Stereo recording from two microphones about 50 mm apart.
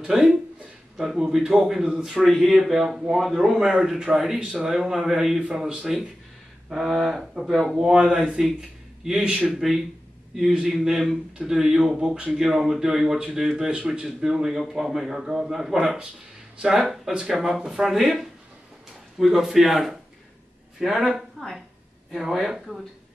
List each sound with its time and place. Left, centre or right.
0.0 s speech: centre
2.2 s speech: centre
7.7 s speech: centre
8.5 s a sound: centre
9.5 s speech: centre
12.3 s speech: centre
22.2 s speech: centre